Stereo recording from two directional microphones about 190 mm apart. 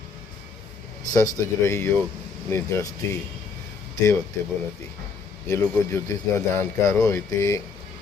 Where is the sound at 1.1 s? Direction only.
15° left (ahead or behind).